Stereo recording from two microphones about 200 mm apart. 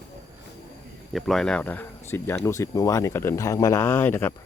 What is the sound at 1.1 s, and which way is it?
Speech, centre (ahead or behind).